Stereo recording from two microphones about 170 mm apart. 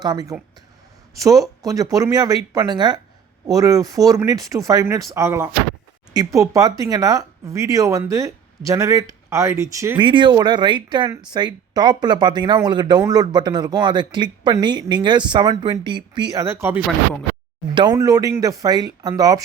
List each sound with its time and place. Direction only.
0.0 s speech: 20° right (ahead or behind)
10.0 s speech: 30° right (ahead or behind)